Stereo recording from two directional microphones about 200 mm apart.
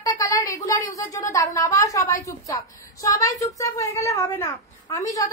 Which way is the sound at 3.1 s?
15° left (ahead or behind).